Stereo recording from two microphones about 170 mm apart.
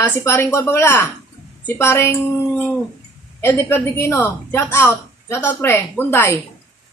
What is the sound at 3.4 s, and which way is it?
A woman's voice, 15° left (ahead or behind).